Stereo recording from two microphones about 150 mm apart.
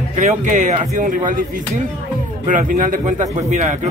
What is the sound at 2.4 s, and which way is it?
A man's voice, 60° right (ahead or behind).